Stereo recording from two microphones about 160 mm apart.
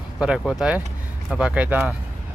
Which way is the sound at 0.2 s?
5° right (ahead or behind).